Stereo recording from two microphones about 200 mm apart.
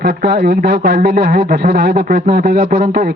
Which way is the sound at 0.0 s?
55° right (ahead or behind).